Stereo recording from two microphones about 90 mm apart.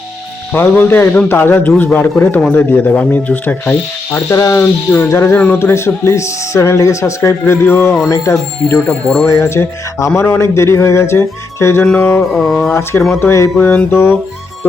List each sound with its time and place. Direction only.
0.5 s speech: 20° left (ahead or behind)
4.3 s speech: 35° left (ahead or behind)
8.9 s speech: 5° left (ahead or behind)
9.2 s speech: 30° left (ahead or behind)
12.3 s speech: centre (ahead or behind)
12.7 s speech: 30° left (ahead or behind)